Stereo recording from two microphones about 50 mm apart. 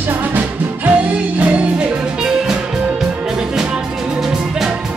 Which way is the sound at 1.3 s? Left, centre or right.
Right.